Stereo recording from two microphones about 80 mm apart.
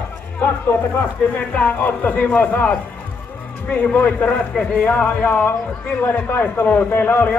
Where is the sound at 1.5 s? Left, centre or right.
Centre.